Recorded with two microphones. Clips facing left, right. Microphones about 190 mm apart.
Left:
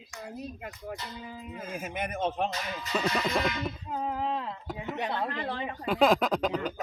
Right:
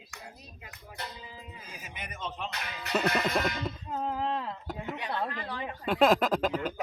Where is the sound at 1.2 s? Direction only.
55° left (ahead or behind).